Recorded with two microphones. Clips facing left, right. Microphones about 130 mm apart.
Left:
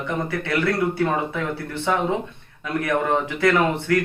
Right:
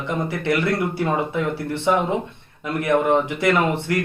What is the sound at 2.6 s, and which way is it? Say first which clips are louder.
Speech: right 3 dB; 20° right (ahead or behind).